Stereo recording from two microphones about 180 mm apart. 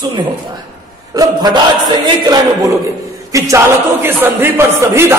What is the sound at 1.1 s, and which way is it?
A man's voice, 25° right (ahead or behind).